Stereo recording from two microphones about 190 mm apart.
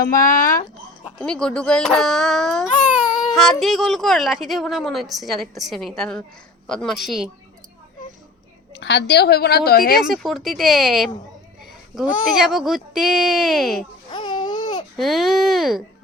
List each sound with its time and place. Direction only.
0.0 s speech: 45° left (ahead or behind)
1.2 s speech: 5° left (ahead or behind)
8.7 s a woman's voice: 65° left (ahead or behind)
10.0 s speech: centre (ahead or behind)
14.1 s a sound: 25° left (ahead or behind)
14.9 s speech: centre (ahead or behind)